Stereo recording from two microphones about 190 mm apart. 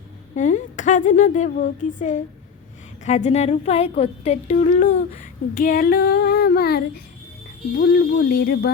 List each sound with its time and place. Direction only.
0.3 s speech: 40° left (ahead or behind)